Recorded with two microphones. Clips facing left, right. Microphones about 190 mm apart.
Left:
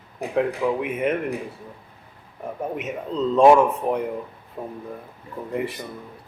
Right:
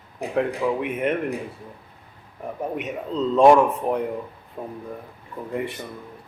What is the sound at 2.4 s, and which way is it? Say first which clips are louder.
Speech: even; centre (ahead or behind).